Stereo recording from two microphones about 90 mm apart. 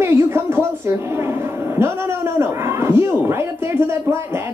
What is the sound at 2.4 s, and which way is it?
Speech, 25° right (ahead or behind).